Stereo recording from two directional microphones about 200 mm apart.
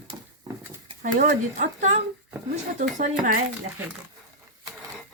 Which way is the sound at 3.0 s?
40° right (ahead or behind).